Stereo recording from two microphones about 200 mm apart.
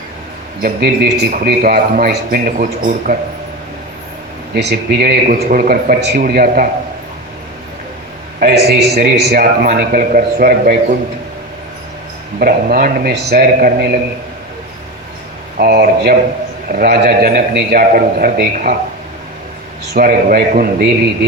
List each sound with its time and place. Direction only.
0.6 s a man's voice: 55° right (ahead or behind)
4.5 s a man's voice: 50° right (ahead or behind)
8.4 s a man's voice: 50° right (ahead or behind)
12.4 s a man's voice: 45° right (ahead or behind)
15.5 s a man's voice: 50° right (ahead or behind)
19.9 s a man's voice: 45° right (ahead or behind)